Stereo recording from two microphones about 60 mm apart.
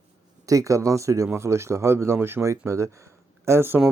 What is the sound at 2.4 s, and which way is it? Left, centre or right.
Speech, right.